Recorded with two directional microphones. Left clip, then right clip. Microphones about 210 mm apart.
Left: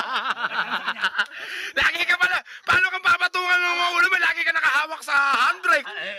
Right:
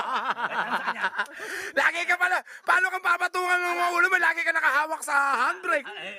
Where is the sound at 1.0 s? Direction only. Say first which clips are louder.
Left 4 dB; 20° right (ahead or behind).